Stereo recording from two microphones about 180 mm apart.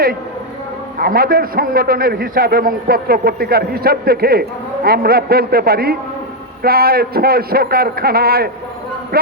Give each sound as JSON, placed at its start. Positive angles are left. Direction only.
{"t": 0.9, "sound": "a man's voice", "side_deg": -55}